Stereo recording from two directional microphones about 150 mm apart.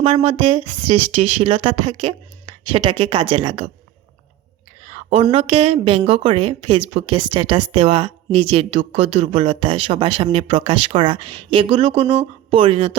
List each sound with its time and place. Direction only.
0.0 s speech: 40° right (ahead or behind)
4.9 s a woman's voice: 45° right (ahead or behind)